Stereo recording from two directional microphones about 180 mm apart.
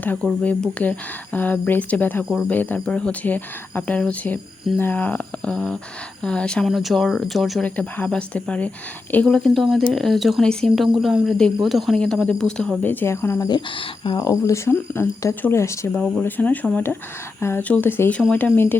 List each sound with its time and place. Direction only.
0.4 s speech: 10° left (ahead or behind)
13.7 s speech: 25° left (ahead or behind)
15.9 s speech: 5° left (ahead or behind)